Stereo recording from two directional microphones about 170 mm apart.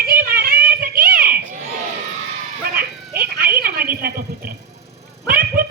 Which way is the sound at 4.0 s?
65° right (ahead or behind).